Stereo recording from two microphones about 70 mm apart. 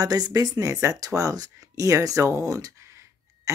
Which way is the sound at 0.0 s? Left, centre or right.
Right.